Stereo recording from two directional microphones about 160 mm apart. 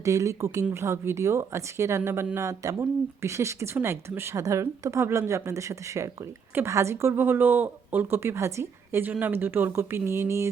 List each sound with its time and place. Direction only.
0.0 s speech: 20° right (ahead or behind)